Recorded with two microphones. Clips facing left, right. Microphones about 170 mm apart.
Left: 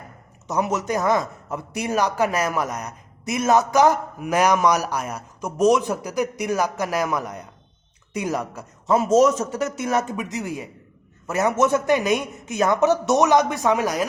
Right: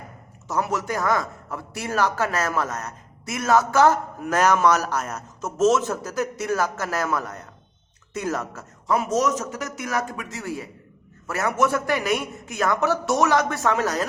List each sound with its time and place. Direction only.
0.4 s a man's voice: 20° left (ahead or behind)
9.0 s speech: 25° left (ahead or behind)